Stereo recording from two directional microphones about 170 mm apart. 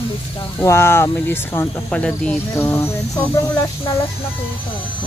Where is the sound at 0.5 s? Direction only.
15° left (ahead or behind).